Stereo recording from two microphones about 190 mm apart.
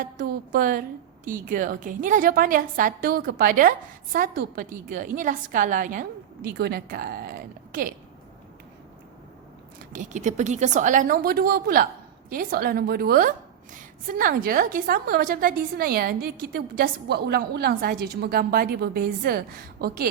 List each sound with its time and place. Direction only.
0.0 s a woman's voice: 50° right (ahead or behind)
9.9 s a woman's voice: 40° right (ahead or behind)